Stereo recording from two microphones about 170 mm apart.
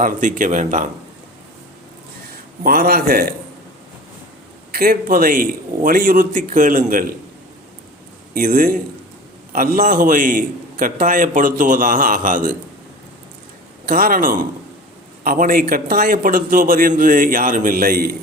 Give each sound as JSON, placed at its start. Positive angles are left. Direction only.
{"t": 0.0, "sound": "a man's voice", "side_deg": -50}
{"t": 2.6, "sound": "a man's voice", "side_deg": -60}
{"t": 4.7, "sound": "a man's voice", "side_deg": -60}
{"t": 8.3, "sound": "a man's voice", "side_deg": -55}
{"t": 13.8, "sound": "a man's voice", "side_deg": -60}